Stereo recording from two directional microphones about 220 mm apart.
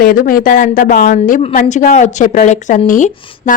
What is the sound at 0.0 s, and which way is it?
A woman's voice, 40° left (ahead or behind).